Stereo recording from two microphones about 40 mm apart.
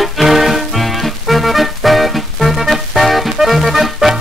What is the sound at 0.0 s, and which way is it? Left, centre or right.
Music, centre.